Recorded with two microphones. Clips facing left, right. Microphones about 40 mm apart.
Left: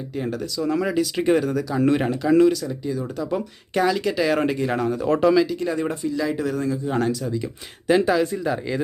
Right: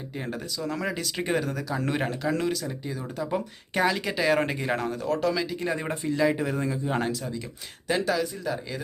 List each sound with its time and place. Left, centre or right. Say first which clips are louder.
0.6 s speech: left 9 dB; centre
5.0 s speech: left 8 dB; left
5.5 s speech: left 4 dB; centre
5.9 s speech: left 3 dB; right
6.1 s speech: right 2 dB; right
7.9 s speech: left 8 dB; centre
8.1 s speech: left 7 dB; left